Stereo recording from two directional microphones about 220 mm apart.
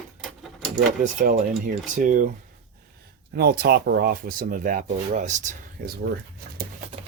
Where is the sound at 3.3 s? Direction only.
45° right (ahead or behind).